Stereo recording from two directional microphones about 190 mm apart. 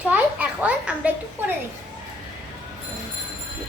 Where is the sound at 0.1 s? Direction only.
10° right (ahead or behind).